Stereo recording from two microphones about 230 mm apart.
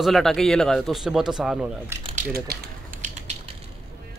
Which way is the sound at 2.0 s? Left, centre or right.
Right.